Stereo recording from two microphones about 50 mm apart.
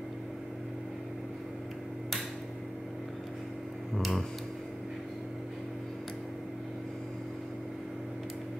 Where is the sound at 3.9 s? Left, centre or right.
Centre.